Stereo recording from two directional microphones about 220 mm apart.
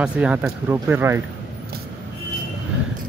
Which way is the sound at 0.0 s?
5° right (ahead or behind).